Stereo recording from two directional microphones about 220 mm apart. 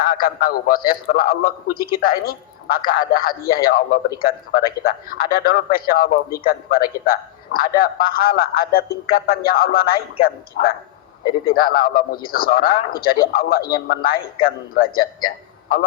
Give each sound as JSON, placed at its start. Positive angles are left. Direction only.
{"t": 0.0, "sound": "a man's voice", "side_deg": 40}